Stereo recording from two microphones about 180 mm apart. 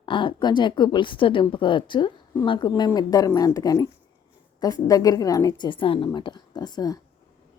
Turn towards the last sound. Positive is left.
turn(degrees=20)  # may be behind; listen again after turning